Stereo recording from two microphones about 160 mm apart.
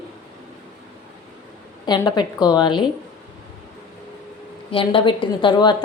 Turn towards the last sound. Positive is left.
turn(degrees=30)  # may be behind; listen again after turning